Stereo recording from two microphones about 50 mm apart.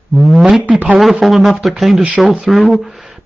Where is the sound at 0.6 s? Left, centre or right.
Right.